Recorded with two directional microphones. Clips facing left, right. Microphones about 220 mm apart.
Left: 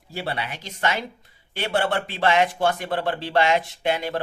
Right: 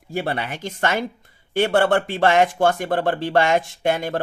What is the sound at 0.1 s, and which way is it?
Speech, 50° right (ahead or behind).